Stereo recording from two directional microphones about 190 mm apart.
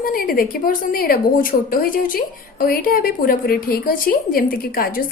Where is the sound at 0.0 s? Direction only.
50° left (ahead or behind).